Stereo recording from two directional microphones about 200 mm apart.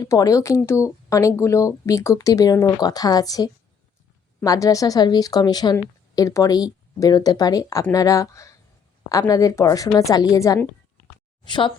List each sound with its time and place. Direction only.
0.0 s speech: 15° left (ahead or behind)